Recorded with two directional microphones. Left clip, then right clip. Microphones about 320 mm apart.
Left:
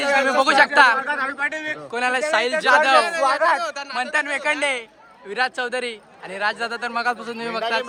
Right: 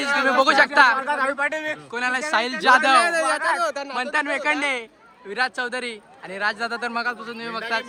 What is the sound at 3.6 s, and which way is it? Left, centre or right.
Speech, centre.